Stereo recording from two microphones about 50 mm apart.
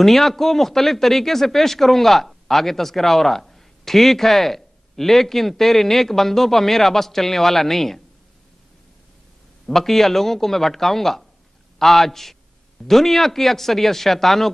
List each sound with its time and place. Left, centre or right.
0.0 s speech: centre
9.7 s speech: centre